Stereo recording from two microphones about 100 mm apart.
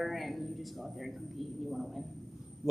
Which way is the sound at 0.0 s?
Centre (ahead or behind).